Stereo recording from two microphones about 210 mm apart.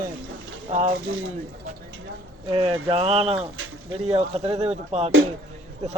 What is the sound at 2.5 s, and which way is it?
Speech, 25° right (ahead or behind).